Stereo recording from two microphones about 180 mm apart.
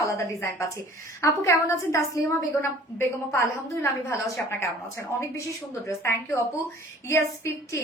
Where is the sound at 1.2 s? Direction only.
15° left (ahead or behind).